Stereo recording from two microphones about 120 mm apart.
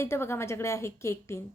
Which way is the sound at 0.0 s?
20° left (ahead or behind).